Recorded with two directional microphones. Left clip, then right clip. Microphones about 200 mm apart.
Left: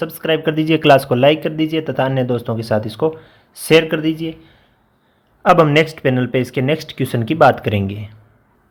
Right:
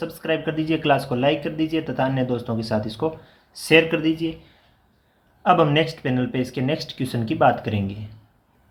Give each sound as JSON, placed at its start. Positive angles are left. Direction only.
{"t": 0.0, "sound": "speech", "side_deg": 45}
{"t": 5.4, "sound": "speech", "side_deg": 40}